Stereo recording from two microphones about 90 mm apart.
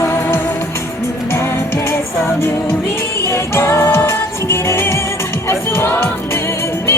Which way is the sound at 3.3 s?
30° left (ahead or behind).